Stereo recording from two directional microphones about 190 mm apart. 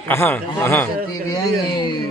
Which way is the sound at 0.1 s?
10° left (ahead or behind).